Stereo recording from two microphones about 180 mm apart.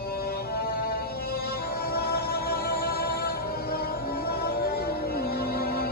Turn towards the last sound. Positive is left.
turn(degrees=60)  # may be behind; listen again after turning